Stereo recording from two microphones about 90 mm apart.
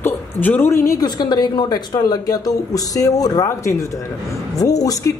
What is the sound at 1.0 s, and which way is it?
A man's voice, 55° left (ahead or behind).